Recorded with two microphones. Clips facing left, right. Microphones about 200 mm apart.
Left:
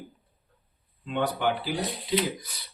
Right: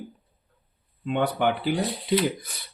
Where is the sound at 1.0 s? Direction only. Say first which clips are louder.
Right 3 dB; 60° right (ahead or behind).